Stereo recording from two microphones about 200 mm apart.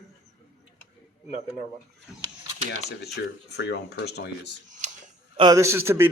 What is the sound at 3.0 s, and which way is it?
Speech, 55° left (ahead or behind).